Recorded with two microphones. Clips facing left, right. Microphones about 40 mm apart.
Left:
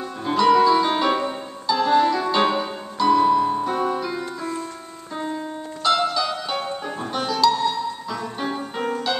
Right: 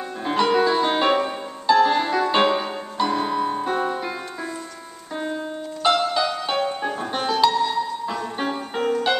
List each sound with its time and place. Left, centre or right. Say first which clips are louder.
0.2 s music: left 3 dB; right
5.2 s music: right 1 dB; centre